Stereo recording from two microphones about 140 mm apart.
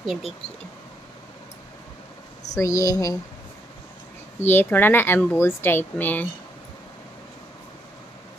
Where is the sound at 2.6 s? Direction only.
20° left (ahead or behind).